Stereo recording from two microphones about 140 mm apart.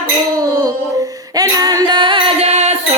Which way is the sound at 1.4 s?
25° right (ahead or behind).